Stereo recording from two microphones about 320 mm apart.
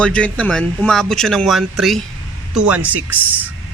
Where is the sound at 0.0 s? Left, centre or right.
Centre.